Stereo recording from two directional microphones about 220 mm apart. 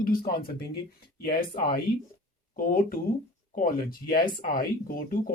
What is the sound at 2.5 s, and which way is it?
Speech, 40° left (ahead or behind).